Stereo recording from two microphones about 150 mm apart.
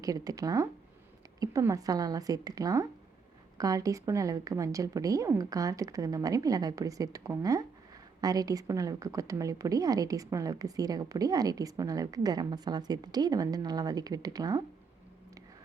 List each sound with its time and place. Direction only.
0.0 s a woman's voice: 25° right (ahead or behind)